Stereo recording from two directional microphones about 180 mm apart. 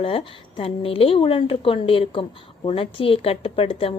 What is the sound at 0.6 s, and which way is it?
A woman's voice, 30° left (ahead or behind).